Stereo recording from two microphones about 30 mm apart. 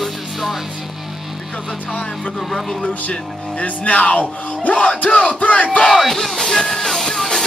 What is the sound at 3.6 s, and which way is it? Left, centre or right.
Music, left.